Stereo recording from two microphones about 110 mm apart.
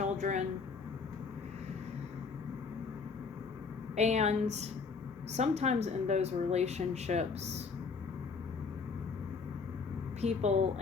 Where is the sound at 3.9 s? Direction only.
90° right.